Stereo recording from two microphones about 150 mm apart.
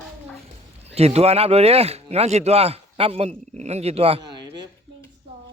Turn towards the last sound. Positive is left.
turn(degrees=-45)  # may be behind; listen again after turning